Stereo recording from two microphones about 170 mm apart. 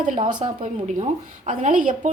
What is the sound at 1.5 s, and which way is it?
Speech, 45° right (ahead or behind).